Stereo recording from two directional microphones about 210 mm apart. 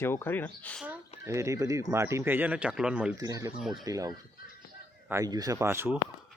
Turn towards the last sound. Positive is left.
turn(degrees=-10)  # may be behind; listen again after turning